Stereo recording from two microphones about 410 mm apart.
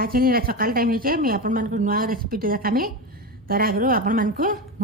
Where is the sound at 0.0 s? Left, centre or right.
Right.